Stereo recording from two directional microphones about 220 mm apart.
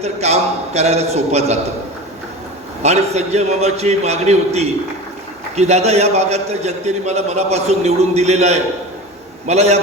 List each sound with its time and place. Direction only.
0.0 s a man's voice: 30° right (ahead or behind)
2.8 s a man's voice: 30° right (ahead or behind)